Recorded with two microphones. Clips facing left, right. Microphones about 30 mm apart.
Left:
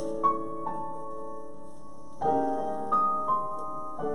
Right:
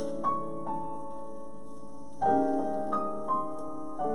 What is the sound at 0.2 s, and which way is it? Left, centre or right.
Music, centre.